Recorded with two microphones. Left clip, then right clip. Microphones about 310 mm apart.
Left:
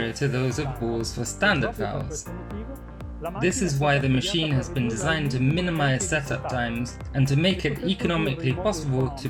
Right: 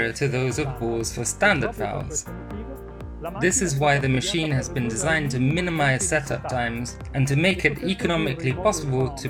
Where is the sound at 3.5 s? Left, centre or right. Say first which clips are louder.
Right 3 dB; right.